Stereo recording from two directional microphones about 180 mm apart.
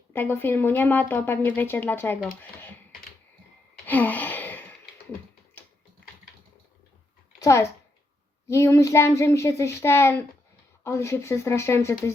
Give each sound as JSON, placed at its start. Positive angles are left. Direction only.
{"t": 0.1, "sound": "speech", "side_deg": 10}
{"t": 3.8, "sound": "gasp", "side_deg": 10}
{"t": 7.3, "sound": "a child's voice", "side_deg": 15}